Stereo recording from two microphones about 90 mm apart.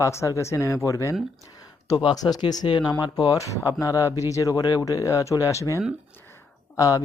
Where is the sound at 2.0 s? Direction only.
50° left (ahead or behind).